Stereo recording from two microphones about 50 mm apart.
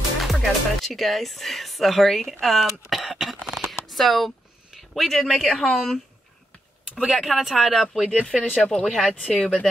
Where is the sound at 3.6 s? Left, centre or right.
Centre.